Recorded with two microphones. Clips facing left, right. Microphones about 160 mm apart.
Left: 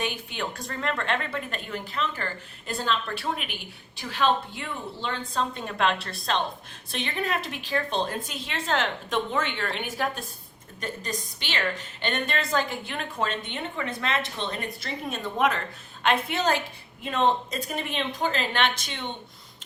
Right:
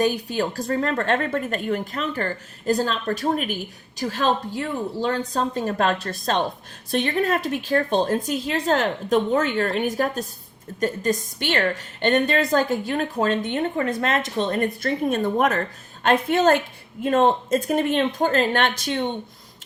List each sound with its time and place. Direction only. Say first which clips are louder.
0.0 s a woman's voice: right 9 dB; 40° right (ahead or behind)